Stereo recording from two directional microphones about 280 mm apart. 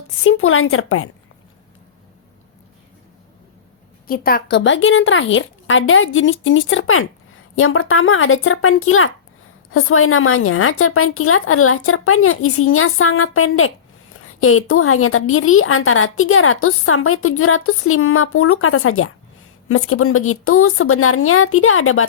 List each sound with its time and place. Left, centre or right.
0.2 s a woman's voice: left
4.0 s a woman's voice: left